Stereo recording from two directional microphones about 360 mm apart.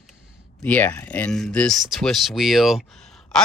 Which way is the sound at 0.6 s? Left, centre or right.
Centre.